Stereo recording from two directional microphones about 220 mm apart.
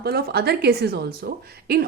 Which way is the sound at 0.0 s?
45° right (ahead or behind).